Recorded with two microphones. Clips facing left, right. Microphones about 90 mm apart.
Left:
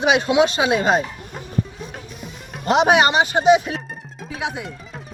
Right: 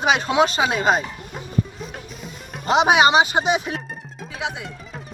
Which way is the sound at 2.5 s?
Centre (ahead or behind).